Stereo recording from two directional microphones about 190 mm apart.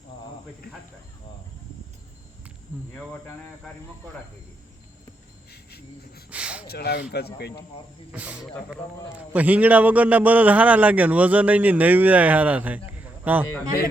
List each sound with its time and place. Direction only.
2.7 s a man's voice: 10° right (ahead or behind)
5.5 s insect: 55° left (ahead or behind)
6.3 s a sound: 5° right (ahead or behind)
6.7 s speech: 55° left (ahead or behind)
8.1 s a man's voice: 5° right (ahead or behind)